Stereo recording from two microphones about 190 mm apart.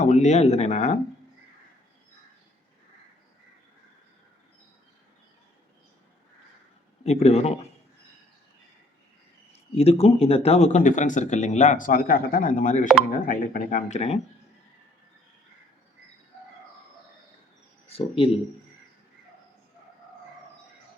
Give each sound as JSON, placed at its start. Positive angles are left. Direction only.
{"t": 0.0, "sound": "speech", "side_deg": 40}
{"t": 7.0, "sound": "speech", "side_deg": 35}
{"t": 9.5, "sound": "speech", "side_deg": 30}
{"t": 17.8, "sound": "speech", "side_deg": 30}